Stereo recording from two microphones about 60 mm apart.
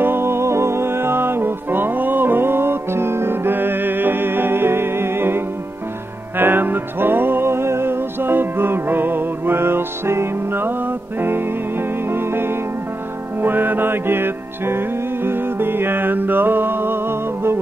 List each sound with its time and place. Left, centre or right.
0.0 s music: right